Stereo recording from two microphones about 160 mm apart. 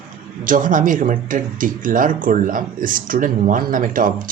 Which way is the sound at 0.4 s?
55° right (ahead or behind).